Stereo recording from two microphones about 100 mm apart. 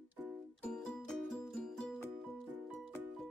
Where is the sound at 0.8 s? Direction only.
Centre (ahead or behind).